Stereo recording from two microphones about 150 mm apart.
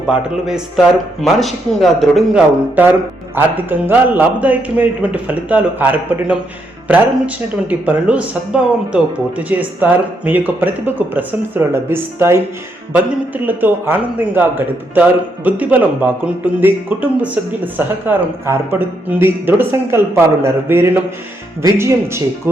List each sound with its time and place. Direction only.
0.1 s a man's voice: 5° right (ahead or behind)
2.8 s a man's voice: 15° right (ahead or behind)